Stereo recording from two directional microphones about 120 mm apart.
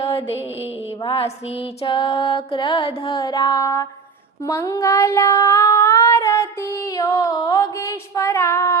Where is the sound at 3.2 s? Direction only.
35° left (ahead or behind).